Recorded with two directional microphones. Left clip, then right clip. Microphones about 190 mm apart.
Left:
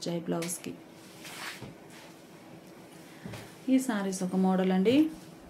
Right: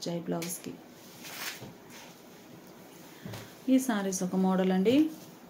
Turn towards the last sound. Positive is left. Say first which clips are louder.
# even
turn(degrees=0)  # may be behind; listen again after turning